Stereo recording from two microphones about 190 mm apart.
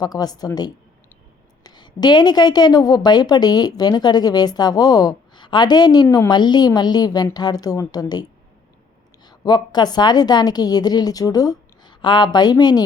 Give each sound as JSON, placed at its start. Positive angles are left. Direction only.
{"t": 0.0, "sound": "a woman's voice", "side_deg": 20}